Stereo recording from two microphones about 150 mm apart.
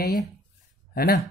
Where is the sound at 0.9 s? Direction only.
80° left.